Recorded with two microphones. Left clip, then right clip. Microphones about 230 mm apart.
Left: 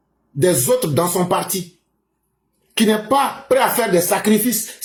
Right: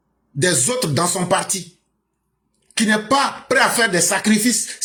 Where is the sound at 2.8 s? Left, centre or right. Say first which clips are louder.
Left 1 dB; right.